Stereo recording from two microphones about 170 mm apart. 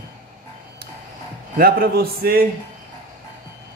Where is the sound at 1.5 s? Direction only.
60° right (ahead or behind).